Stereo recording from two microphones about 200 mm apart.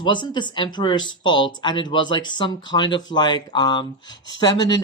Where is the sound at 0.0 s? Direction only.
25° left (ahead or behind).